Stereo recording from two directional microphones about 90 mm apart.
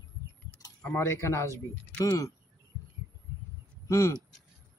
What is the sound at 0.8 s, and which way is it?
Speech, 30° left (ahead or behind).